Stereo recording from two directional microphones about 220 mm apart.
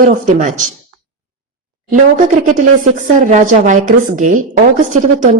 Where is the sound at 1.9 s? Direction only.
35° right (ahead or behind).